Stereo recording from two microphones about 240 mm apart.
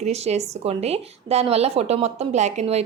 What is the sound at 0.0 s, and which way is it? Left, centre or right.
A woman's voice, right.